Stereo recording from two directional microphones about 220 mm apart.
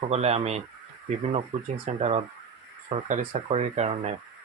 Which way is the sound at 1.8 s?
30° right (ahead or behind).